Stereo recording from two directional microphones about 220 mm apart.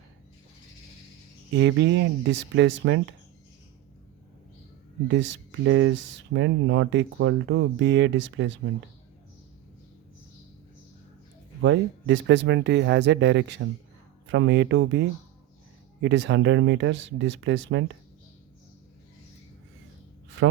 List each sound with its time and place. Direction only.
1.5 s speech: 55° right (ahead or behind)
5.0 s speech: 55° right (ahead or behind)
11.6 s speech: 55° right (ahead or behind)